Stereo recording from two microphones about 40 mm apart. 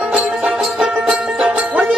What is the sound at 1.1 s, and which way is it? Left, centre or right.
Music, right.